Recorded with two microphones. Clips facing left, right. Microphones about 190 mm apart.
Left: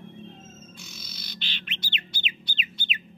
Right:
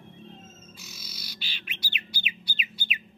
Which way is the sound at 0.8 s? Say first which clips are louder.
Left 2 dB; 5° right (ahead or behind).